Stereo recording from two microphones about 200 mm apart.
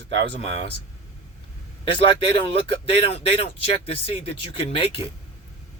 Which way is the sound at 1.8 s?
25° left (ahead or behind).